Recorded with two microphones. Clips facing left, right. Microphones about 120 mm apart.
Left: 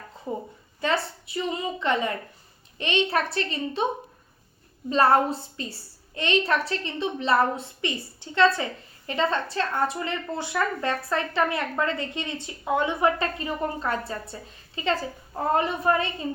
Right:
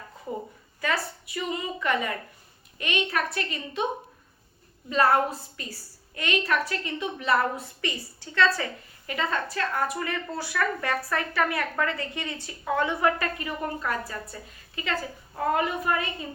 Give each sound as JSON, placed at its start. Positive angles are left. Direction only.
{"t": 0.8, "sound": "a woman's voice", "side_deg": 25}
{"t": 4.9, "sound": "a woman's voice", "side_deg": 30}